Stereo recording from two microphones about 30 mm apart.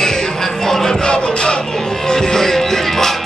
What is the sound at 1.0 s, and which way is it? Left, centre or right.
Music, left.